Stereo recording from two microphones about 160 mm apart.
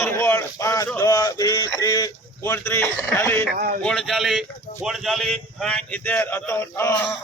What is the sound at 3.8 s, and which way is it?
A man's voice, centre (ahead or behind).